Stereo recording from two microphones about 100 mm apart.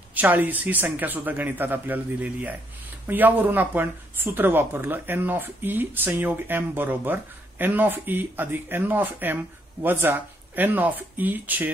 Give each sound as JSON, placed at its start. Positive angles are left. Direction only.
{"t": 0.1, "sound": "speech", "side_deg": -15}